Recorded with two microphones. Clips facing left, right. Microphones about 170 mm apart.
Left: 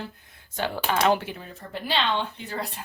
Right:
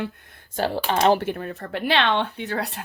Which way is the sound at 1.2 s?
60° right (ahead or behind).